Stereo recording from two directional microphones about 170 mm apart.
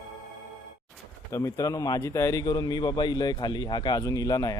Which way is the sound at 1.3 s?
20° left (ahead or behind).